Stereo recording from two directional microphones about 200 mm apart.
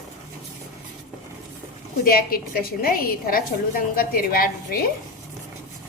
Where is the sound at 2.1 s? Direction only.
45° left (ahead or behind).